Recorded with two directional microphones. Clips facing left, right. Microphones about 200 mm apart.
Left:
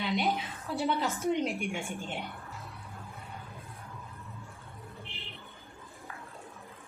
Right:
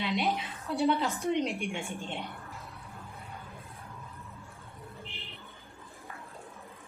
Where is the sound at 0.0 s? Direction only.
Centre (ahead or behind).